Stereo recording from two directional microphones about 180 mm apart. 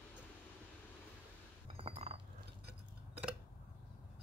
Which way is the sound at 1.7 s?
35° right (ahead or behind).